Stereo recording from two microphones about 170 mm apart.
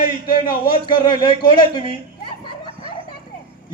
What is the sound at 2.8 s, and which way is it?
Music, 30° right (ahead or behind).